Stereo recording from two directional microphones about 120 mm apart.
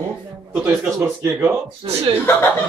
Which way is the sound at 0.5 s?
25° right (ahead or behind).